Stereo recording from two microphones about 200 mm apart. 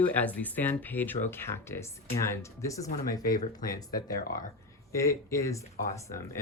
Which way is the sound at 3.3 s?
45° left (ahead or behind).